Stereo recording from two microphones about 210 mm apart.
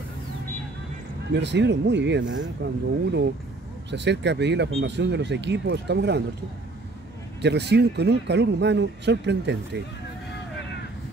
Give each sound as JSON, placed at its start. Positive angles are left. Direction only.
{"t": 1.3, "sound": "speech", "side_deg": -55}
{"t": 7.4, "sound": "speech", "side_deg": -55}